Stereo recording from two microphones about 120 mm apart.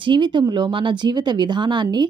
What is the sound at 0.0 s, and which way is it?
Speech, 40° right (ahead or behind).